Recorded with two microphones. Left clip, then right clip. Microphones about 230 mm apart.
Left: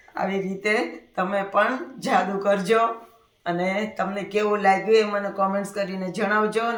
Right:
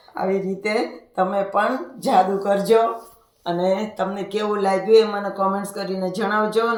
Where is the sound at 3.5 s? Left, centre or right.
Left.